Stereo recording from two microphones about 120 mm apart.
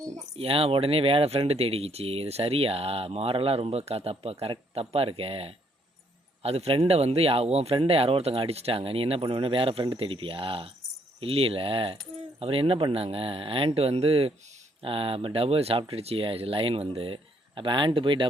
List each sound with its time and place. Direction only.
0.3 s speech: 50° right (ahead or behind)